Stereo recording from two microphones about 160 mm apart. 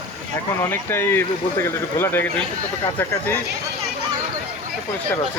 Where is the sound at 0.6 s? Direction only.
15° left (ahead or behind).